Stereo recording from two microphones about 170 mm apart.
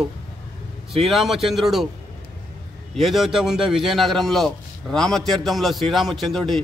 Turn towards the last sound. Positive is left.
turn(degrees=0)  # may be behind; listen again after turning